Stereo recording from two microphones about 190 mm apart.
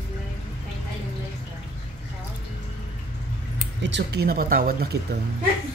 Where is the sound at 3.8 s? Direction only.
65° right (ahead or behind); by 5.2 s 50° right (ahead or behind).